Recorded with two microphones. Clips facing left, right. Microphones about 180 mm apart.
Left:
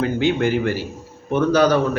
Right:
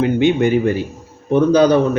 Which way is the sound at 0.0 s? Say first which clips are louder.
Right 5 dB; 20° right (ahead or behind).